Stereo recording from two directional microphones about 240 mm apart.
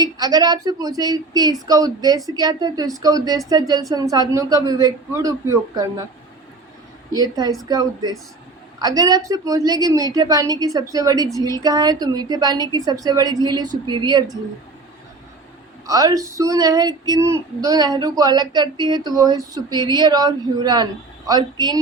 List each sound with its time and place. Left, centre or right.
0.0 s female singing: centre
7.1 s female singing: centre
15.9 s female singing: centre